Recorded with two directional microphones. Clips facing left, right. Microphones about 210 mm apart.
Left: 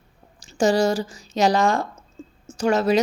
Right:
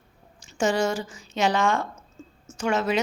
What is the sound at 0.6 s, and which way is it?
A woman's voice, 35° left (ahead or behind).